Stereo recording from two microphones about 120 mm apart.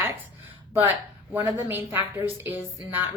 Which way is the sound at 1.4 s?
15° right (ahead or behind).